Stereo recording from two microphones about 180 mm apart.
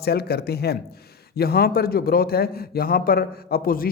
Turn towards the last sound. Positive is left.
turn(degrees=55)  # may be behind; listen again after turning